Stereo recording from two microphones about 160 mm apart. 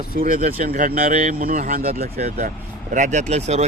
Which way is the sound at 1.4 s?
60° right (ahead or behind).